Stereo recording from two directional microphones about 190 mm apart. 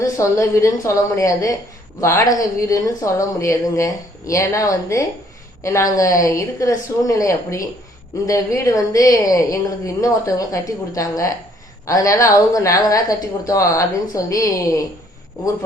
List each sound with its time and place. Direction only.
0.0 s a woman's voice: 15° left (ahead or behind)